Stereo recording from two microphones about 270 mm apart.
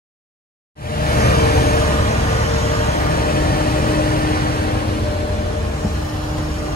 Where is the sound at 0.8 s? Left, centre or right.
Left.